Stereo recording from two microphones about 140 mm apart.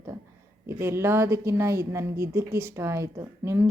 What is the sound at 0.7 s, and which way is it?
Speech, 15° right (ahead or behind).